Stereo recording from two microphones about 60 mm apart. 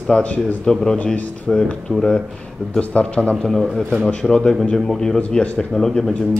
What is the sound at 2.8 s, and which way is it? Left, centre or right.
Speech, centre.